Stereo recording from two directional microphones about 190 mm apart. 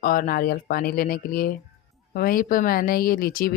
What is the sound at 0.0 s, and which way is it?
Speech, 50° left (ahead or behind).